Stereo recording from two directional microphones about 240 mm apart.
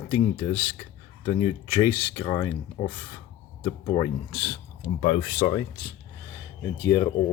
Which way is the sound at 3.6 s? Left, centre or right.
Centre.